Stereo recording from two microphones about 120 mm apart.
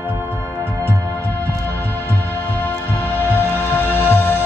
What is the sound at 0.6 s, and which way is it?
Music, 20° right (ahead or behind).